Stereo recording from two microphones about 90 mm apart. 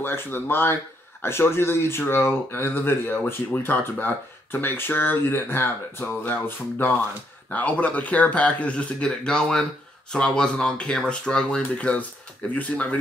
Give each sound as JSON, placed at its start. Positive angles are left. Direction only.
{"t": 0.0, "sound": "speech", "side_deg": 25}